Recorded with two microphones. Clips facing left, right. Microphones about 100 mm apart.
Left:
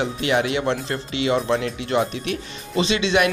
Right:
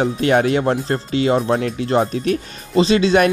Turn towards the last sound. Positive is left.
turn(degrees=-40)  # may be behind; listen again after turning